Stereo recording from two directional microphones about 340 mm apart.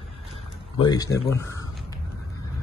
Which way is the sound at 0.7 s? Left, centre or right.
Centre.